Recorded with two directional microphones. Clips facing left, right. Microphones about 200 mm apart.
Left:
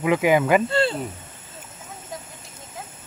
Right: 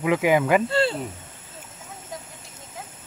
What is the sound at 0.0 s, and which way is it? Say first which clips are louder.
Speech: left 1 dB; 20° left (ahead or behind).